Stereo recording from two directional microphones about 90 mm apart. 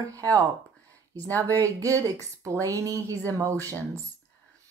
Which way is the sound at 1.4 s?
35° right (ahead or behind).